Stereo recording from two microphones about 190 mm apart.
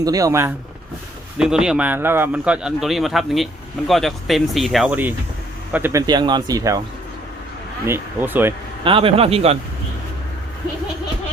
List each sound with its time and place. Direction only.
0.0 s speech: 20° right (ahead or behind)
1.4 s speech: 5° right (ahead or behind)
7.9 s speech: 10° right (ahead or behind)
8.8 s speech: 30° right (ahead or behind)